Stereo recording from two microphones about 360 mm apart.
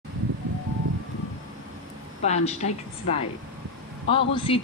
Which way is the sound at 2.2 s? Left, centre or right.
Centre.